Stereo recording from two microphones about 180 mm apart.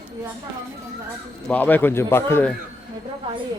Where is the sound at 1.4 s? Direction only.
10° left (ahead or behind).